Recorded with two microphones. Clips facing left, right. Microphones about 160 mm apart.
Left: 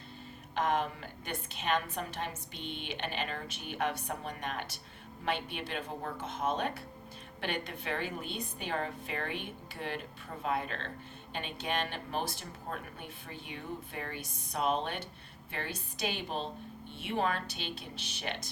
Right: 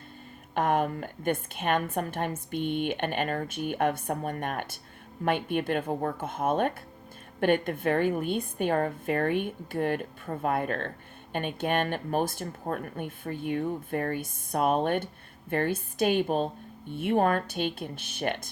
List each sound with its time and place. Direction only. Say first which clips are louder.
0.5 s a woman's voice: right 6 dB; 50° right (ahead or behind)